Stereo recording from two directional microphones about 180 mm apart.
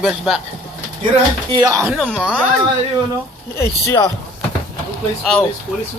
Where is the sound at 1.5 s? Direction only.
20° right (ahead or behind).